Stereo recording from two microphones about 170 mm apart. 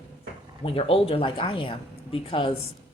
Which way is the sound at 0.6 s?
35° left (ahead or behind).